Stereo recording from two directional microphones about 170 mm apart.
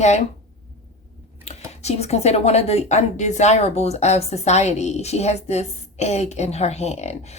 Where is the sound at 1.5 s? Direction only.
40° left (ahead or behind).